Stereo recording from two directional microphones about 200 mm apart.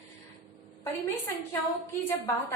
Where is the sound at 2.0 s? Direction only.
15° left (ahead or behind).